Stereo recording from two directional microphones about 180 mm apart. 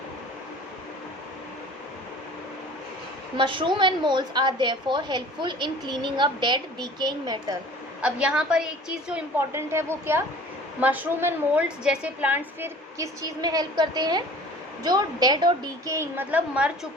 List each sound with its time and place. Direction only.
3.3 s a woman's voice: 25° right (ahead or behind)
8.0 s a woman's voice: 5° right (ahead or behind)